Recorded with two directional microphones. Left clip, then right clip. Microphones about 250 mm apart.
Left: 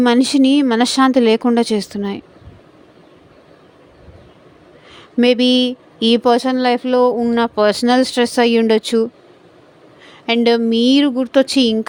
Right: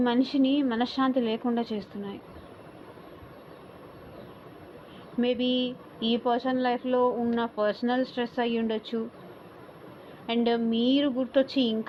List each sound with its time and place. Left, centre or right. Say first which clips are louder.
0.0 s speech: left 12 dB; left
5.2 s speech: left 14 dB; left
10.2 s speech: left 12 dB; left